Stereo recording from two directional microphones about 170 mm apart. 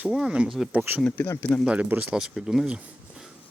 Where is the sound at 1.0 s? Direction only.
10° left (ahead or behind).